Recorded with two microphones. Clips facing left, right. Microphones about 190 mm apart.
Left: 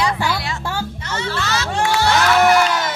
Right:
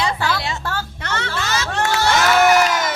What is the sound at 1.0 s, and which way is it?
Speech, 65° right (ahead or behind).